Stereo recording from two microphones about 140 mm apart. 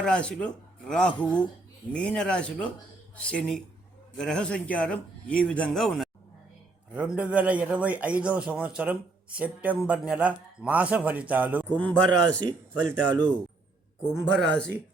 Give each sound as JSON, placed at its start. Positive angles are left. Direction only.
{"t": 0.0, "sound": "speech", "side_deg": 5}
{"t": 6.9, "sound": "a man's voice", "side_deg": -10}
{"t": 11.7, "sound": "speech", "side_deg": 10}